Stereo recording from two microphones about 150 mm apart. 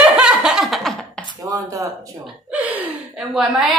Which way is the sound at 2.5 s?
10° right (ahead or behind).